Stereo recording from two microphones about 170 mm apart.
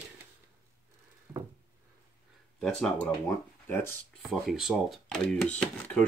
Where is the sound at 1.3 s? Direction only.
10° right (ahead or behind).